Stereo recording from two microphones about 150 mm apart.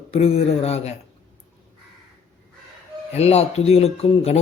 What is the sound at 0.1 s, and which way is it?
Speech, 45° left (ahead or behind).